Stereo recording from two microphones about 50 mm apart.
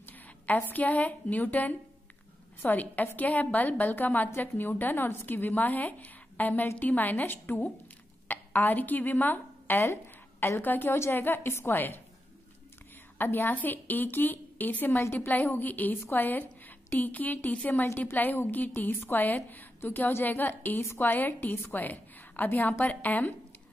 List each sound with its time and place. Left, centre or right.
0.0 s a sound: left
0.7 s a woman's voice: left
13.2 s speech: left
21.8 s a woman's voice: left